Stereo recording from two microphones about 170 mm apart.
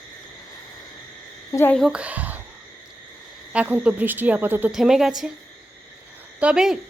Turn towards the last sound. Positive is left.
turn(degrees=-5)  # may be behind; listen again after turning